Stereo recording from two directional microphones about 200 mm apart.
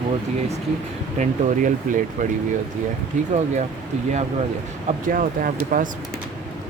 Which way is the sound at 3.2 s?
35° right (ahead or behind).